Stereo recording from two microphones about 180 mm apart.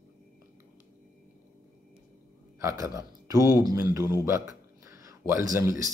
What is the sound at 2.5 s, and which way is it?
Speech, 15° right (ahead or behind).